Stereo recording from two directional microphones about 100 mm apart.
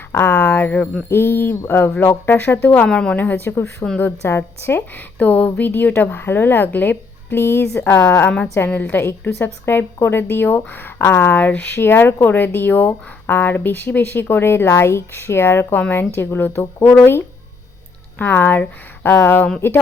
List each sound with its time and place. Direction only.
0.1 s a woman's voice: 20° left (ahead or behind)